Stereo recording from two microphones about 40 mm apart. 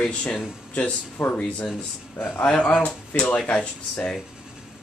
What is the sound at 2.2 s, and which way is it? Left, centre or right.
Speech, left.